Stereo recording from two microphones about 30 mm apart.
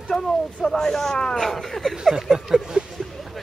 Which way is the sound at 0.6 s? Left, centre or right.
Centre.